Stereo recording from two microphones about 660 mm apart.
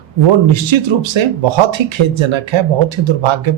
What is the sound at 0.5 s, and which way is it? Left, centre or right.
Speech, right.